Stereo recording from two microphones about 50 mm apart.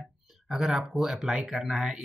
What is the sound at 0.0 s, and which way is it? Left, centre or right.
Speech, centre.